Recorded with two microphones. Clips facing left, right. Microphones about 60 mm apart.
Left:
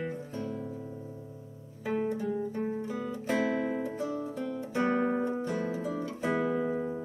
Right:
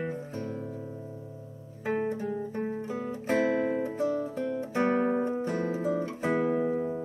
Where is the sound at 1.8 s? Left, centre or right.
Right.